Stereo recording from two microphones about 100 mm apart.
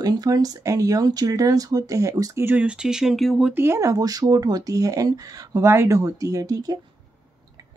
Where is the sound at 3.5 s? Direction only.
25° right (ahead or behind).